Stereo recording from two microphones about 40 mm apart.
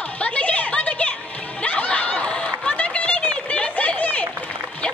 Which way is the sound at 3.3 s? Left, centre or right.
Left.